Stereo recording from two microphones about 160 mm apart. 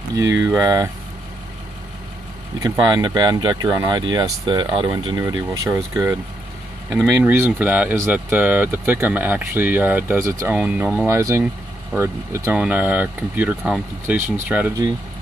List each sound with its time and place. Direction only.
0.1 s speech: 20° right (ahead or behind)
2.6 s speech: 25° right (ahead or behind)